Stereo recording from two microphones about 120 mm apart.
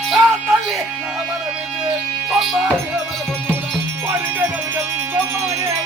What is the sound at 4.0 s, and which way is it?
Music, 15° right (ahead or behind).